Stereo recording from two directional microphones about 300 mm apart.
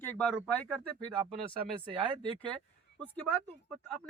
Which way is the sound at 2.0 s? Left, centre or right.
Centre.